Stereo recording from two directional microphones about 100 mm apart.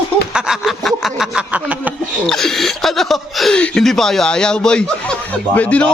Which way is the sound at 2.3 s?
5° left (ahead or behind).